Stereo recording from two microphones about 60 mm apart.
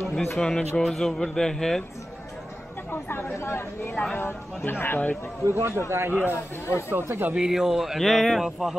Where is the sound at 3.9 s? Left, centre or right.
Centre.